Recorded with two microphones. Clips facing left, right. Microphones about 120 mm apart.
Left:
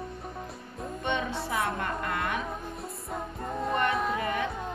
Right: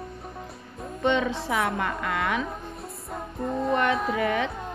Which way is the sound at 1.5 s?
90° right.